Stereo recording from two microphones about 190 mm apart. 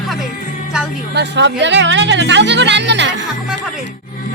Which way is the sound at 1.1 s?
65° right (ahead or behind).